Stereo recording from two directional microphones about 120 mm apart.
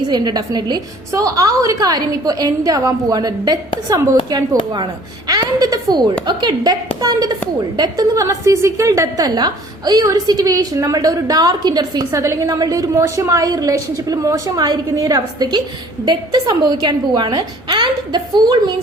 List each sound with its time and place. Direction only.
0.1 s a woman's voice: 35° right (ahead or behind)